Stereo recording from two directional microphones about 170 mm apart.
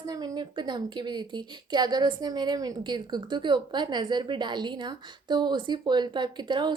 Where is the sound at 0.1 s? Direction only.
25° right (ahead or behind).